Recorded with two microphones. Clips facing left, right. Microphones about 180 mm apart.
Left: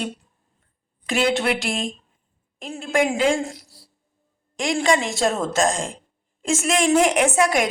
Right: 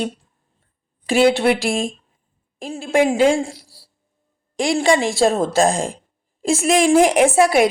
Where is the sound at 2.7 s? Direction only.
30° right (ahead or behind).